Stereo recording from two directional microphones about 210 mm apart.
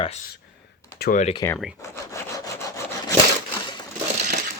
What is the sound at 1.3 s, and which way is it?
Speech, 10° left (ahead or behind).